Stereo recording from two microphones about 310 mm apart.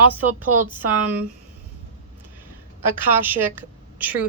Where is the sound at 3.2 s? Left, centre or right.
Centre.